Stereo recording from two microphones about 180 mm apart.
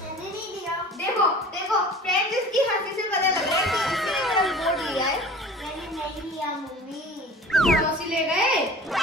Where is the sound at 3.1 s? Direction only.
Centre (ahead or behind).